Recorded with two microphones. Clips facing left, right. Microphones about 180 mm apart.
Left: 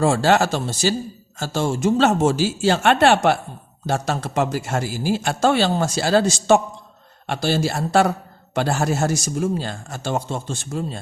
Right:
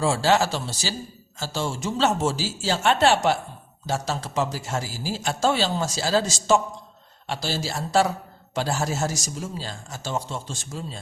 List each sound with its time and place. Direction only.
0.0 s speech: 55° left (ahead or behind)